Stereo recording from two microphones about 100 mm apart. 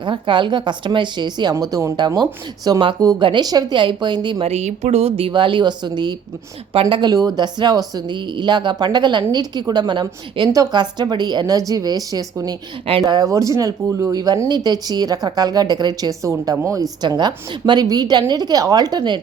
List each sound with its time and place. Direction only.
0.0 s speech: 55° right (ahead or behind)
1.5 s speech: 35° right (ahead or behind)
3.2 s speech: 50° right (ahead or behind)
4.4 s speech: 90° right; by 5.3 s 75° right (ahead or behind)
5.3 s speech: 55° right (ahead or behind)
10.5 s speech: 40° right (ahead or behind)